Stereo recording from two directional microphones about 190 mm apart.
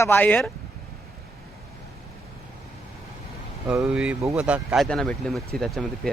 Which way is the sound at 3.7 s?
5° right (ahead or behind).